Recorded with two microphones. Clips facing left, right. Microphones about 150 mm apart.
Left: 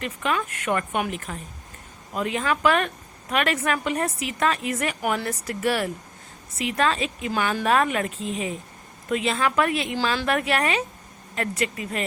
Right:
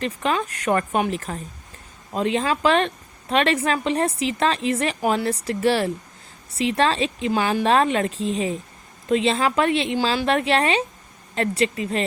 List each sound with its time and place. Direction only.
0.0 s a woman's voice: 30° right (ahead or behind)